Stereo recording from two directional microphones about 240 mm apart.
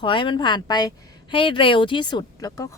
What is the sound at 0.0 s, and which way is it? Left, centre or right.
Speech, left.